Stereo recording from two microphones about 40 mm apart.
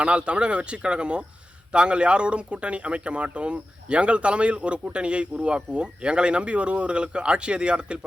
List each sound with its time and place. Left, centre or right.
0.0 s speech: right